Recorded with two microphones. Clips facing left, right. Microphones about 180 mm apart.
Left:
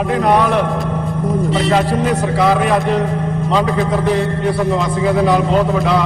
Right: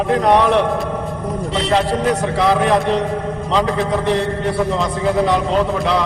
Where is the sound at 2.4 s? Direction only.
5° left (ahead or behind).